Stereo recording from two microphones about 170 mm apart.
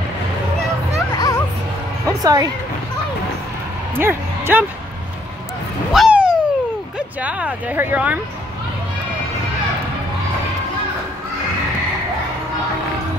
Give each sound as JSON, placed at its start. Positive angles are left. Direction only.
{"t": 1.1, "sound": "music", "side_deg": 20}
{"t": 2.0, "sound": "music", "side_deg": -20}
{"t": 3.9, "sound": "speech", "side_deg": -15}
{"t": 5.9, "sound": "a sound", "side_deg": -5}
{"t": 7.2, "sound": "speech", "side_deg": -10}